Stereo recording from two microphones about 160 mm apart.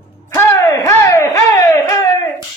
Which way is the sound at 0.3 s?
20° left (ahead or behind).